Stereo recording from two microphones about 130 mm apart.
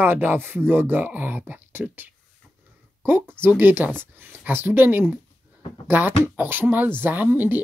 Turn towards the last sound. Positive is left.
turn(degrees=-15)  # may be behind; listen again after turning